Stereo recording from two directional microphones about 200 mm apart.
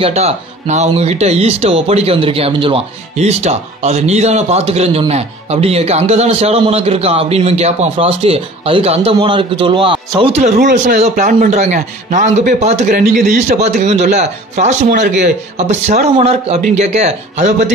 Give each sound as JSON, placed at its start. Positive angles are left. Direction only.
{"t": 0.0, "sound": "speech", "side_deg": -30}
{"t": 10.8, "sound": "speech", "side_deg": -40}
{"t": 12.9, "sound": "speech", "side_deg": -45}